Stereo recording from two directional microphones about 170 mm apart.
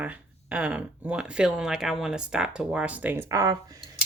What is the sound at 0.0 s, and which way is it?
Speech, 10° right (ahead or behind).